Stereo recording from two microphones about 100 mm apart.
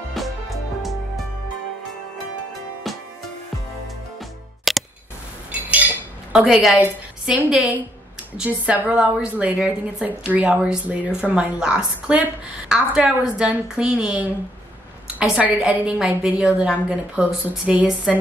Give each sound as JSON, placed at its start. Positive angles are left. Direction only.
{"t": 0.1, "sound": "music", "side_deg": 0}
{"t": 4.7, "sound": "music", "side_deg": 0}
{"t": 5.5, "sound": "dishes", "side_deg": -15}
{"t": 6.4, "sound": "a woman's voice", "side_deg": -5}